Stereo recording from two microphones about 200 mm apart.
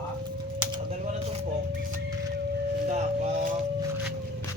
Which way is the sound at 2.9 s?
35° right (ahead or behind).